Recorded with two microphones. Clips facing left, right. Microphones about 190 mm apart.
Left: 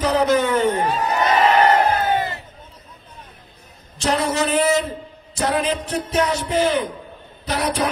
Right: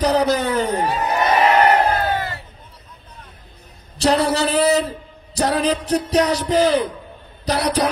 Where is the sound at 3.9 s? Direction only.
35° right (ahead or behind).